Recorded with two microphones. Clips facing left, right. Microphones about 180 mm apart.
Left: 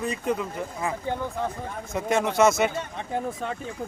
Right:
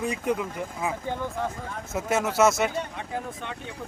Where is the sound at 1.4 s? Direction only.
15° left (ahead or behind).